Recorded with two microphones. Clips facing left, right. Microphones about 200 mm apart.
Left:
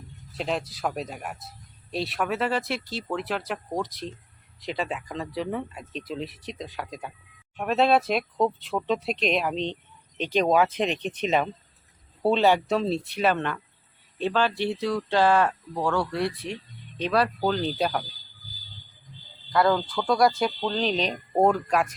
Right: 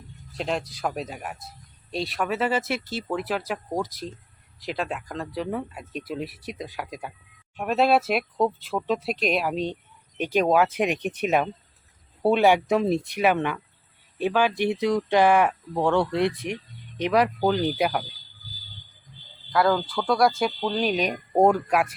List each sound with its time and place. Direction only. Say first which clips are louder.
0.3 s speech: right 1 dB; centre (ahead or behind)
19.5 s speech: even; centre (ahead or behind)